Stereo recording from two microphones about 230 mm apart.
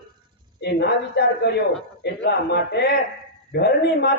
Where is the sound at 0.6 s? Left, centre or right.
Left.